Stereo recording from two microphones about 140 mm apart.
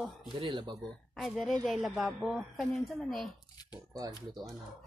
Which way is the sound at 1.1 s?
Centre (ahead or behind).